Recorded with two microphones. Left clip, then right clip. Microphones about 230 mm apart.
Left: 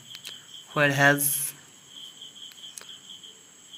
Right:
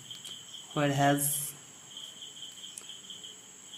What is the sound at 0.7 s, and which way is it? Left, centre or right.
Speech, left.